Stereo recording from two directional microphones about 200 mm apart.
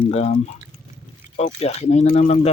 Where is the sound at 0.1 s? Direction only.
35° left (ahead or behind).